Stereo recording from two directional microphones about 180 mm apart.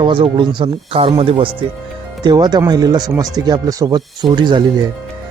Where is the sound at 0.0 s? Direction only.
30° right (ahead or behind).